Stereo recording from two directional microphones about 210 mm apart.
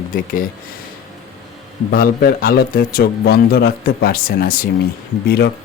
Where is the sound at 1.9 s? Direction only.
45° left (ahead or behind).